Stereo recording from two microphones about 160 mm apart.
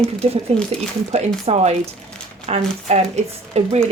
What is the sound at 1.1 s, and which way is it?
Speech, 40° right (ahead or behind).